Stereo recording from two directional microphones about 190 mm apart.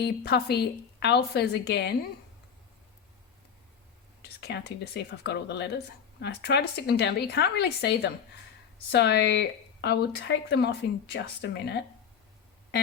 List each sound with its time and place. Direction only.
0.0 s speech: 60° left (ahead or behind)
4.2 s whispering: 60° left (ahead or behind)
5.2 s speech: 65° left (ahead or behind)